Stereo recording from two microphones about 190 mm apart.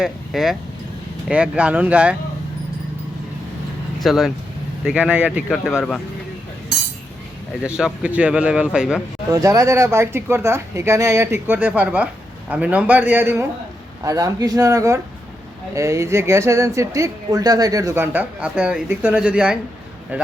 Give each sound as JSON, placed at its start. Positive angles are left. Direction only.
{"t": 0.0, "sound": "a man's voice", "side_deg": 0}
{"t": 4.0, "sound": "a man's voice", "side_deg": 0}
{"t": 7.6, "sound": "a man's voice", "side_deg": -5}
{"t": 9.3, "sound": "speech", "side_deg": -15}